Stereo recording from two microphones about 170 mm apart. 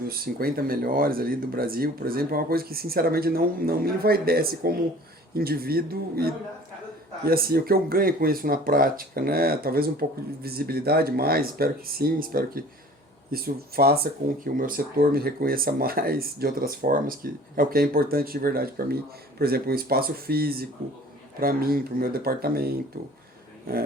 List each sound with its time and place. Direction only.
0.1 s speech: 60° right (ahead or behind)